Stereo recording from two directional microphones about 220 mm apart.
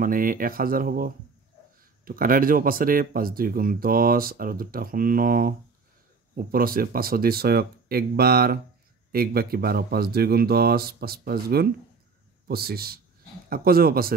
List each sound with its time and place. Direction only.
0.0 s speech: 40° right (ahead or behind)